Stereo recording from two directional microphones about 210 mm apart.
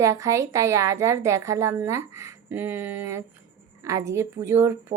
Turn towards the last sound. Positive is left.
turn(degrees=-10)  # may be behind; listen again after turning